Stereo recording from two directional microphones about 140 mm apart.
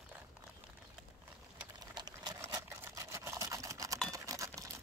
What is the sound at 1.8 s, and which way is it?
Sewing machine, 30° right (ahead or behind).